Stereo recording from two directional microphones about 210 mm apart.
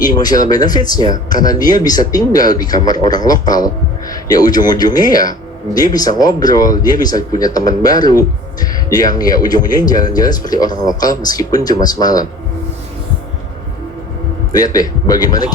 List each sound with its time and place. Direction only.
0.0 s speech: 20° left (ahead or behind)
14.5 s speech: 15° left (ahead or behind)